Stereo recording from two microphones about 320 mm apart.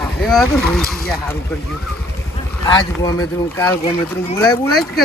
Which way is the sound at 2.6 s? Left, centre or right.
Centre.